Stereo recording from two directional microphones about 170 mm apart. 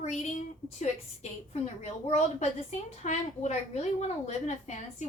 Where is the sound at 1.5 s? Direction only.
40° left (ahead or behind).